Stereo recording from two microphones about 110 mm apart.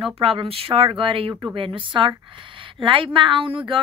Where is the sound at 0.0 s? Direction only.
55° right (ahead or behind).